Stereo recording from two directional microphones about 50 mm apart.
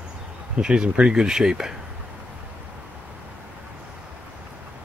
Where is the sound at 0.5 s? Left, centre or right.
Centre.